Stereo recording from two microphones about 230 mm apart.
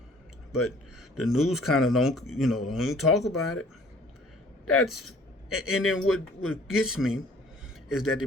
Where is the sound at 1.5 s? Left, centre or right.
Centre.